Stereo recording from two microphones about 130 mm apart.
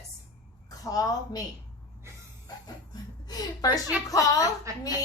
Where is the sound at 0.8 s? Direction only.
30° left (ahead or behind).